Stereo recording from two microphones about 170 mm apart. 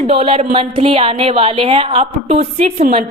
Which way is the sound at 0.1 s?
35° right (ahead or behind).